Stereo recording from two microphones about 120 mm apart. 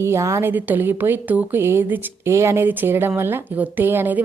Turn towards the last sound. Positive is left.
turn(degrees=-15)  # may be behind; listen again after turning